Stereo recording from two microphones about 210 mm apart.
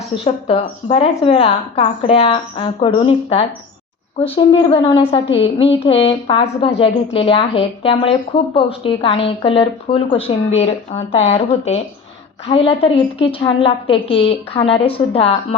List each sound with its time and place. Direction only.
0.3 s a woman's voice: 30° left (ahead or behind)